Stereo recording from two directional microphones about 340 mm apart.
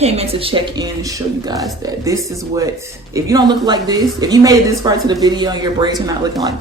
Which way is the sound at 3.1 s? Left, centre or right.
Centre.